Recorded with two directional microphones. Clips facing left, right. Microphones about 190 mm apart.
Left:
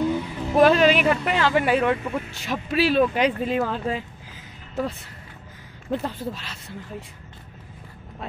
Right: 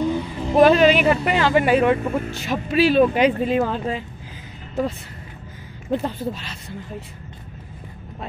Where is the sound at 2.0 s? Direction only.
45° right (ahead or behind).